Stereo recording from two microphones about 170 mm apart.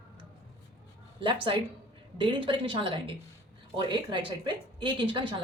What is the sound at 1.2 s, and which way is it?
A woman's voice, 30° right (ahead or behind).